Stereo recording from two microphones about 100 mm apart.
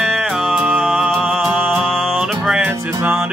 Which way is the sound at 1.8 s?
5° left (ahead or behind).